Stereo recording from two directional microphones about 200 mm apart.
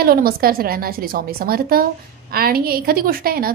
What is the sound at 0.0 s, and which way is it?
A woman's voice, 50° right (ahead or behind).